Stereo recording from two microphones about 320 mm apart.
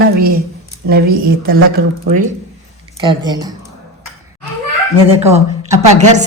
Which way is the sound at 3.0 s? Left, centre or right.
Centre.